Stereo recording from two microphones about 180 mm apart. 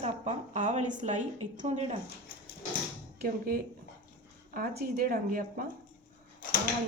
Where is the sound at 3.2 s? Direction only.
55° right (ahead or behind).